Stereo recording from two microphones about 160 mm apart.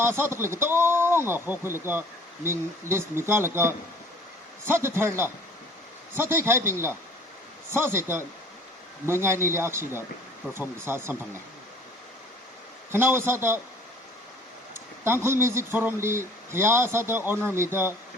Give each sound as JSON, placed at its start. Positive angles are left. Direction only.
{"t": 0.0, "sound": "speech", "side_deg": -15}
{"t": 12.9, "sound": "speech", "side_deg": -15}
{"t": 15.0, "sound": "speech", "side_deg": -15}